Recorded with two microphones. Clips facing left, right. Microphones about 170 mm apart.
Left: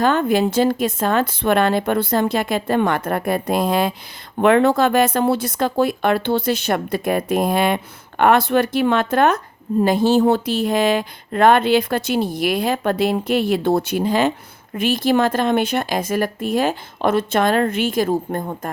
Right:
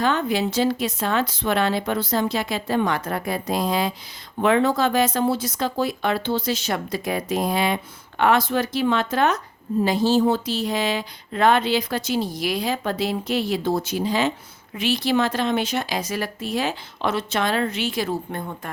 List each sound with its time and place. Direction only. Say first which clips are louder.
0.0 s a woman's voice: left 5 dB; 50° left (ahead or behind)